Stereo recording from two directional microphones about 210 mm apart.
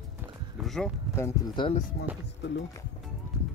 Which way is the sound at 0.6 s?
Centre (ahead or behind).